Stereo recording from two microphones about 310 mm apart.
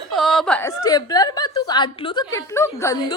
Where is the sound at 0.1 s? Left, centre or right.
Centre.